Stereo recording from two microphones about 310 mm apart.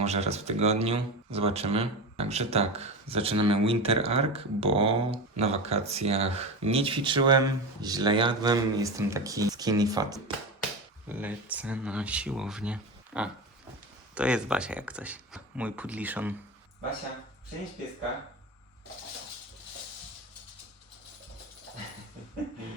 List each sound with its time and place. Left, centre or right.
0.0 s speech: right; by 16.3 s centre